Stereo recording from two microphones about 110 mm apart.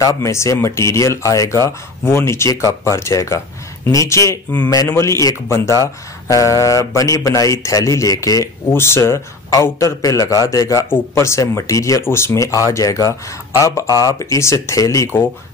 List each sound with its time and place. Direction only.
0.0 s speech: 30° left (ahead or behind)